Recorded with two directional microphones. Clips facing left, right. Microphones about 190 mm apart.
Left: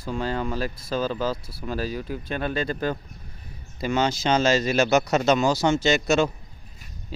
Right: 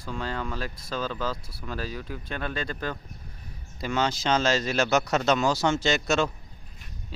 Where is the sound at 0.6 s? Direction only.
5° left (ahead or behind).